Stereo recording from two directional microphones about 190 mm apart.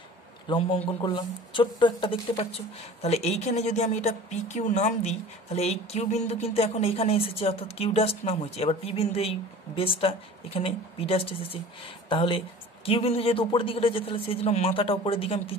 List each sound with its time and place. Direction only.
0.5 s speech: 25° left (ahead or behind)